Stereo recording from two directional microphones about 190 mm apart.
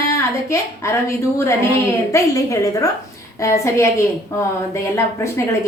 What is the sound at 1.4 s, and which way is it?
A woman's voice, 15° left (ahead or behind).